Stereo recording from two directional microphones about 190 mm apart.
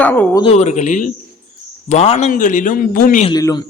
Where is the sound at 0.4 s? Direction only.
35° left (ahead or behind).